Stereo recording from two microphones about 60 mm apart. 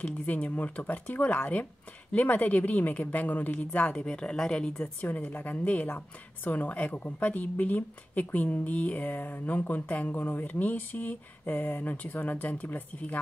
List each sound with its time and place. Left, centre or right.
0.3 s a woman's voice: left
4.0 s speech: centre
5.0 s a woman's voice: left